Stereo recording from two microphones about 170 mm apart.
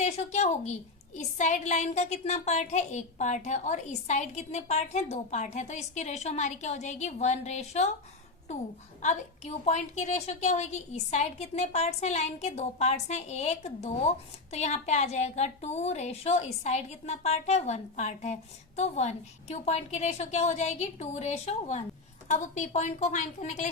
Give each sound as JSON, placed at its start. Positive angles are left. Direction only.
{"t": 0.0, "sound": "a woman's voice", "side_deg": 40}
{"t": 9.0, "sound": "a woman's voice", "side_deg": 40}